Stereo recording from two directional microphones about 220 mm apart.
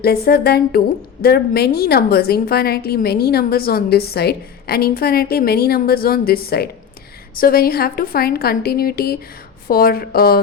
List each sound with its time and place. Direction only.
0.0 s a woman's voice: 45° left (ahead or behind)